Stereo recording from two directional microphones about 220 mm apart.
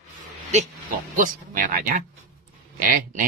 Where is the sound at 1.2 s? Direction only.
40° right (ahead or behind).